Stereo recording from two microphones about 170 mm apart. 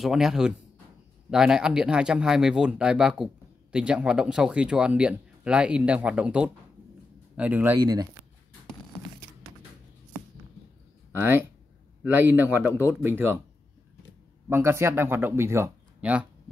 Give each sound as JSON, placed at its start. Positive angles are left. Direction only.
{"t": 0.0, "sound": "speech", "side_deg": 0}
{"t": 7.8, "sound": "speech", "side_deg": -25}
{"t": 11.1, "sound": "speech", "side_deg": -15}
{"t": 14.5, "sound": "speech", "side_deg": -15}